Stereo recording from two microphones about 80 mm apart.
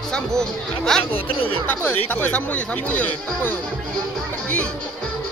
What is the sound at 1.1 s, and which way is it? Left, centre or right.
Speech, left.